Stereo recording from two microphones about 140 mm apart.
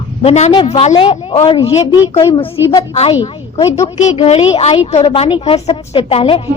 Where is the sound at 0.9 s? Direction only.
40° left (ahead or behind).